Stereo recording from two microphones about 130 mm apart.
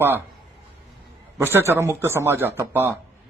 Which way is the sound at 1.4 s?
20° right (ahead or behind).